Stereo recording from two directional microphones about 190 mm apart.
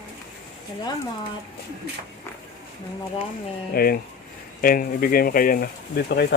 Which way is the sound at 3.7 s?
55° left (ahead or behind).